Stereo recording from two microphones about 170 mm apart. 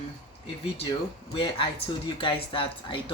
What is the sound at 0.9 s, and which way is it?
Speech, 30° left (ahead or behind).